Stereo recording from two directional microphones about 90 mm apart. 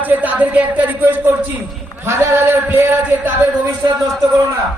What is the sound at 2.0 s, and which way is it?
Speech, 30° right (ahead or behind).